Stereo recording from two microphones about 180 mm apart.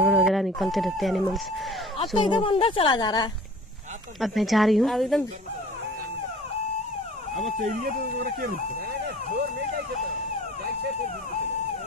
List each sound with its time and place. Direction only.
0.0 s speech: centre (ahead or behind)
2.0 s speech: 25° left (ahead or behind)
4.2 s a woman's voice: centre (ahead or behind)
7.3 s speech: 40° right (ahead or behind)
7.8 s speech: 55° right (ahead or behind)